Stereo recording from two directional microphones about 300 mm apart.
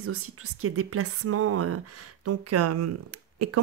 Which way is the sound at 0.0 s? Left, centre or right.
Right.